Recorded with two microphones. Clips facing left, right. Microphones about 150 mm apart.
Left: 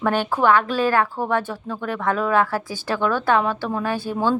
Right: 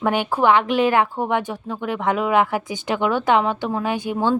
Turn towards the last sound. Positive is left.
turn(degrees=-15)  # may be behind; listen again after turning